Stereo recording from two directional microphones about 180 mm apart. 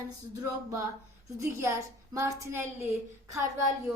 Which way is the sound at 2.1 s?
15° right (ahead or behind).